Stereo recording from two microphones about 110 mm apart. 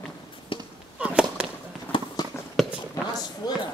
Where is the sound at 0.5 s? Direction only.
50° left (ahead or behind).